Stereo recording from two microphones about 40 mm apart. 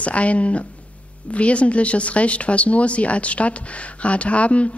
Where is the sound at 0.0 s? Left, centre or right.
Left.